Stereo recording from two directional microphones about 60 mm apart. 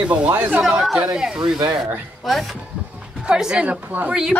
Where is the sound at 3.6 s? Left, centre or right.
Right.